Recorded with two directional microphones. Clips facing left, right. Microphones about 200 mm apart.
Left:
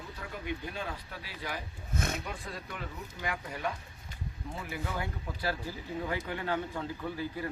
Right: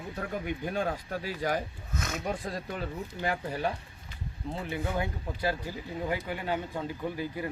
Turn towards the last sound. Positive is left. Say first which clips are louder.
# right 2 dB
turn(degrees=-15)  # may be behind; listen again after turning